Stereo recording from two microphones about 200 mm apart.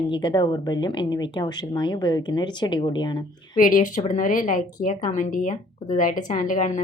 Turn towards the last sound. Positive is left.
turn(degrees=40)  # may be behind; listen again after turning